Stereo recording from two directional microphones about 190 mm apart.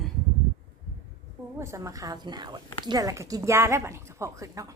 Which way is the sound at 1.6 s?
15° right (ahead or behind).